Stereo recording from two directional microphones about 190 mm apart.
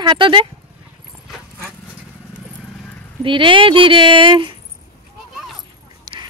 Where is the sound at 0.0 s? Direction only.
25° right (ahead or behind).